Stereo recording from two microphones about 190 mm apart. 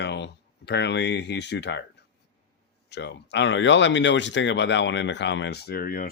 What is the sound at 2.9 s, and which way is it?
Speech, 65° left (ahead or behind).